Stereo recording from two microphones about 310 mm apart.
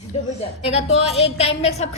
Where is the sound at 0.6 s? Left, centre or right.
Centre.